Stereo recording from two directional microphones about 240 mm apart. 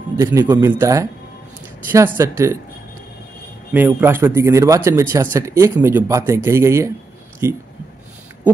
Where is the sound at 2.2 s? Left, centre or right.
Centre.